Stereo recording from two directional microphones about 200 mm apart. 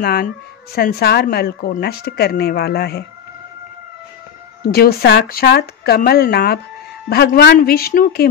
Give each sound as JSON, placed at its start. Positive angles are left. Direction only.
{"t": 0.0, "sound": "speech", "side_deg": 50}
{"t": 4.6, "sound": "speech", "side_deg": 50}